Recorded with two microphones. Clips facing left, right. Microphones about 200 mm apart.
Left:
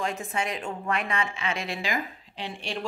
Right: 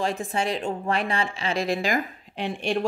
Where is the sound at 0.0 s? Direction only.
30° right (ahead or behind).